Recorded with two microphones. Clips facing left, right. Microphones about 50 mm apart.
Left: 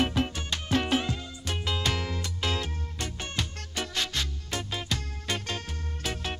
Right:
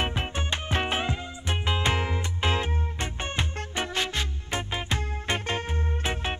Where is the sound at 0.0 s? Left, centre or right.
Right.